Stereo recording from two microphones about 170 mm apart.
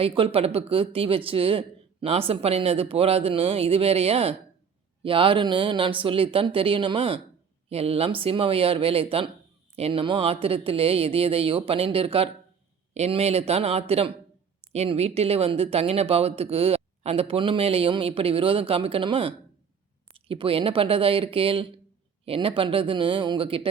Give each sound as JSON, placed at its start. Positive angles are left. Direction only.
{"t": 0.0, "sound": "speech", "side_deg": -35}